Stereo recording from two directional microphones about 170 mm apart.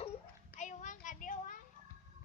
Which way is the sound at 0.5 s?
45° left (ahead or behind).